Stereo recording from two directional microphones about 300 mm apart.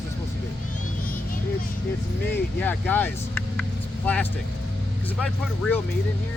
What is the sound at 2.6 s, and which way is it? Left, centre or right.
Speech, centre.